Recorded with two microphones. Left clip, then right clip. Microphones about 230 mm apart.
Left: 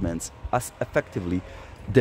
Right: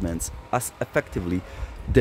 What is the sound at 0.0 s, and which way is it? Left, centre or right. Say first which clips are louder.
Speech: even; centre.